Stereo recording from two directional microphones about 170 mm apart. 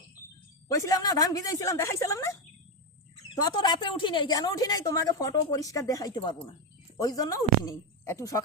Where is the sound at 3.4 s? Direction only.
25° left (ahead or behind).